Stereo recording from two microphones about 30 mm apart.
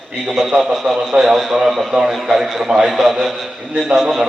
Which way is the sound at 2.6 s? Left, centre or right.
Right.